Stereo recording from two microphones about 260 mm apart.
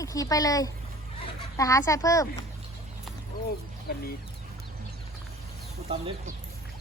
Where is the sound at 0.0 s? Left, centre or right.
Centre.